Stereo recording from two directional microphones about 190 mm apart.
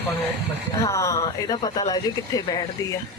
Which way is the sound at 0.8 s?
15° left (ahead or behind).